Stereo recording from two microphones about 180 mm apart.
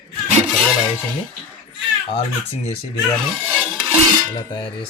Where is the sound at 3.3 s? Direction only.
10° right (ahead or behind).